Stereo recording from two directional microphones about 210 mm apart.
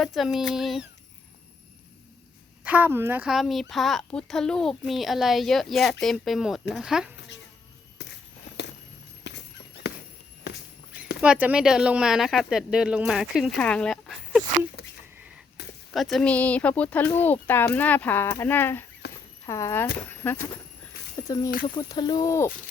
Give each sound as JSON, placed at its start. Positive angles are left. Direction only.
{"t": 0.0, "sound": "speech", "side_deg": 0}
{"t": 2.6, "sound": "speech", "side_deg": -10}
{"t": 9.2, "sound": "horse", "side_deg": 55}
{"t": 9.8, "sound": "a sound", "side_deg": 55}
{"t": 11.2, "sound": "speech", "side_deg": -5}
{"t": 15.9, "sound": "speech", "side_deg": 0}